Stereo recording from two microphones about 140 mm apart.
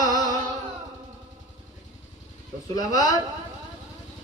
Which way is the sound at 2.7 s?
25° left (ahead or behind).